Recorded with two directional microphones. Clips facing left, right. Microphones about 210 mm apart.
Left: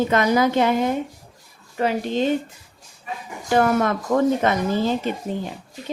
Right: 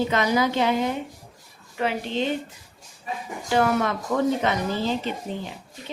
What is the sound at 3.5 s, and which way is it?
Speech, 50° left (ahead or behind).